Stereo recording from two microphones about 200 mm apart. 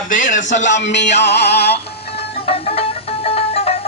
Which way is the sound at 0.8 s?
60° left (ahead or behind).